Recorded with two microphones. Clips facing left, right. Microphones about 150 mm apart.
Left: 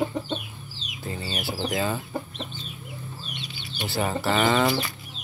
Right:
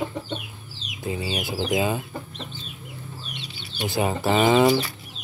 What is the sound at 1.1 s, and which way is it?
Speech, 15° right (ahead or behind).